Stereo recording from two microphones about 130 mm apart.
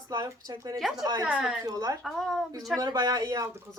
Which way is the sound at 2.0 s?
Centre (ahead or behind).